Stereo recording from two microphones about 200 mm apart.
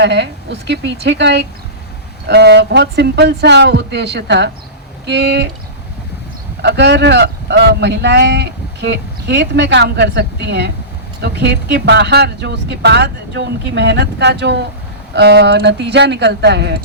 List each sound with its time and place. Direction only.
0.0 s speech: 60° right (ahead or behind)
6.6 s speech: 60° right (ahead or behind)